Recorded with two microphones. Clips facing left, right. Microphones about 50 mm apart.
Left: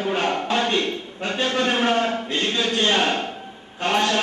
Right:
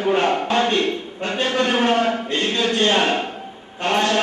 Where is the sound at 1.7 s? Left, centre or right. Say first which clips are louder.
Right 3 dB; centre.